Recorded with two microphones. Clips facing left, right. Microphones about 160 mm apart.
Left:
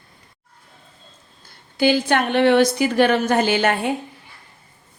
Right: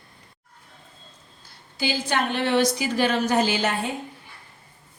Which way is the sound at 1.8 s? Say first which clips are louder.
Left 7 dB; 60° left (ahead or behind).